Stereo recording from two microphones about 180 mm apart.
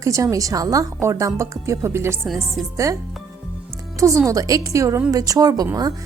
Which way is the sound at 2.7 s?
15° right (ahead or behind).